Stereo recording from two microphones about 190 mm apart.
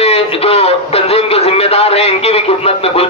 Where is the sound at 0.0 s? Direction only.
30° left (ahead or behind).